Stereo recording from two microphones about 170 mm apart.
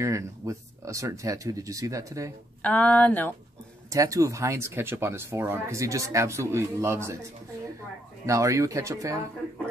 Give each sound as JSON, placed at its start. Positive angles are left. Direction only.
{"t": 0.0, "sound": "speech", "side_deg": -20}
{"t": 2.6, "sound": "speech", "side_deg": 10}
{"t": 3.9, "sound": "speech", "side_deg": -20}
{"t": 8.3, "sound": "speech", "side_deg": -20}